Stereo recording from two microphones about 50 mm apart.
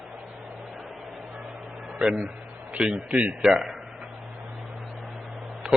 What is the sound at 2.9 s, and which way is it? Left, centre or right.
Speech, right.